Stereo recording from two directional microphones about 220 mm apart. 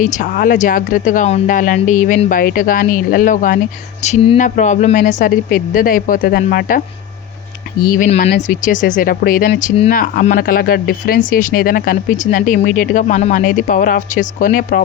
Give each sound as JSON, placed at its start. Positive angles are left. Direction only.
{"t": 0.0, "sound": "speech", "side_deg": 35}
{"t": 7.9, "sound": "speech", "side_deg": 35}